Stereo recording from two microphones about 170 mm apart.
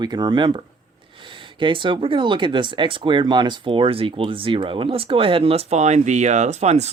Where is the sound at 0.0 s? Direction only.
25° right (ahead or behind).